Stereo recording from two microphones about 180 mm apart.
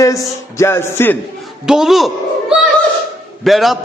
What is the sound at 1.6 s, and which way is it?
A man's voice, 5° right (ahead or behind).